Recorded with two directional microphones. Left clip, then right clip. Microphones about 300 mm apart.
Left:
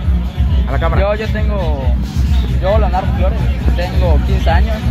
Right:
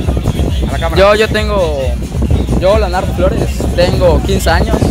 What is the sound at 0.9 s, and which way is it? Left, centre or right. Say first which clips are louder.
Speech: right 12 dB; right.